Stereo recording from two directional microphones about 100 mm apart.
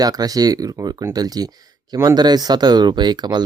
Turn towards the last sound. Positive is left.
turn(degrees=-45)  # may be behind; listen again after turning